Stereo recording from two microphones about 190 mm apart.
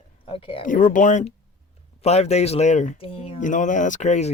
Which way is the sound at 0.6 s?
45° left (ahead or behind).